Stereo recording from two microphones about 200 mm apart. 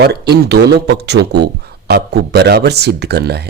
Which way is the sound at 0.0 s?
55° right (ahead or behind).